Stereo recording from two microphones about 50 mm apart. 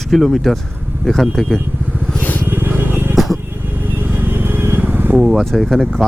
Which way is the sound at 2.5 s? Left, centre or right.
Right.